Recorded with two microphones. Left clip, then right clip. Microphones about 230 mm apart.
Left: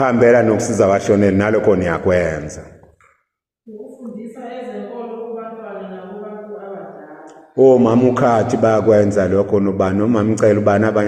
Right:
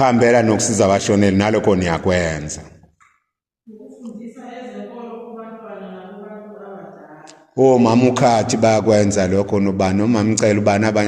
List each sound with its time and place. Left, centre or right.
0.1 s a man's voice: right
1.4 s a man's voice: right
1.7 s a man's voice: right
7.6 s a man's voice: right